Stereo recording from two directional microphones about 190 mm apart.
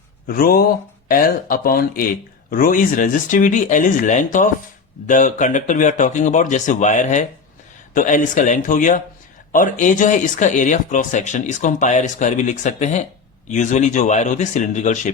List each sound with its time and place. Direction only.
0.3 s speech: 50° left (ahead or behind)